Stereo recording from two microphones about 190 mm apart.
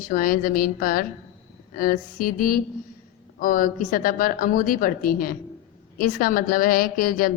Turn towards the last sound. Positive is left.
turn(degrees=50)  # may be behind; listen again after turning